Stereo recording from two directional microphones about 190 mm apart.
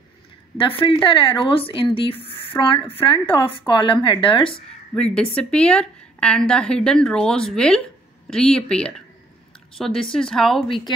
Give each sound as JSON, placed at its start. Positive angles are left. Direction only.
{"t": 0.6, "sound": "speech", "side_deg": 25}
{"t": 4.5, "sound": "speech", "side_deg": 5}
{"t": 10.7, "sound": "speech", "side_deg": 20}